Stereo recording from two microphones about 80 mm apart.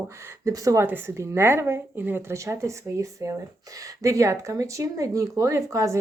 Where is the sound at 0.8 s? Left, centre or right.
Right.